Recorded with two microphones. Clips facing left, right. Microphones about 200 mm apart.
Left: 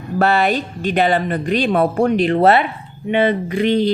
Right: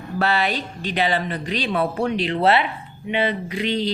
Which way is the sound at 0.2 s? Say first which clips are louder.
Left 6 dB; 50° left (ahead or behind).